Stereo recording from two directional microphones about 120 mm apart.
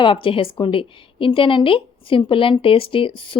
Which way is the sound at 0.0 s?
45° left (ahead or behind).